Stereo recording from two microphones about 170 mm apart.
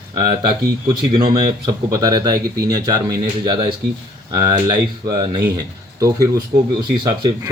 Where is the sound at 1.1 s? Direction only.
25° right (ahead or behind).